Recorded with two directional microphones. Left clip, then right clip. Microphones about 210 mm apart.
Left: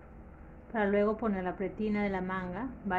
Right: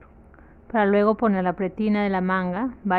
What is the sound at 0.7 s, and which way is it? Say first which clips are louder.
A woman's voice: right 9 dB; 50° right (ahead or behind).